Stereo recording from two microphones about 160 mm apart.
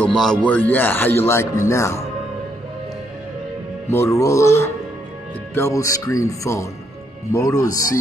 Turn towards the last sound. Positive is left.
turn(degrees=20)  # may be behind; listen again after turning